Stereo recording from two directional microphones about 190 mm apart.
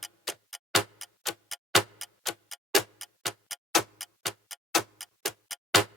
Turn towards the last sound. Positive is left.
turn(degrees=0)  # may be behind; listen again after turning